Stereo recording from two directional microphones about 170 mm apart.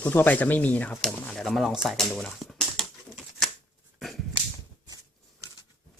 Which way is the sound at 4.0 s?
Centre (ahead or behind).